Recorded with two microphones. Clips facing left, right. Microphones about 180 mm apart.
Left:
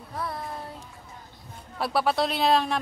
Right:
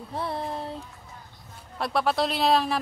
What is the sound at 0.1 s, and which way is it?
Child singing, 25° right (ahead or behind).